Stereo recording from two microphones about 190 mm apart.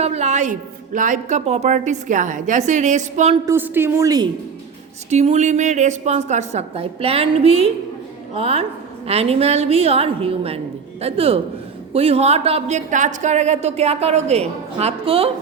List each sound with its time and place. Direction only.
0.0 s a woman's voice: 35° right (ahead or behind)
3.4 s a woman's voice: 10° right (ahead or behind)
5.0 s a woman's voice: 35° right (ahead or behind)